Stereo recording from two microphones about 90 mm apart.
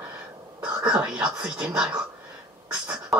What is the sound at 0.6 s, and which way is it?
Whispering, 10° right (ahead or behind).